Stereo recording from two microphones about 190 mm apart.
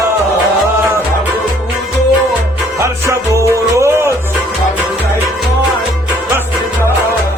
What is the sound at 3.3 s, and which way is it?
Music, 15° right (ahead or behind).